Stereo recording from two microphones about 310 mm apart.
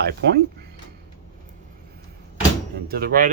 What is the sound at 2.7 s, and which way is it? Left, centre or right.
Speech, right.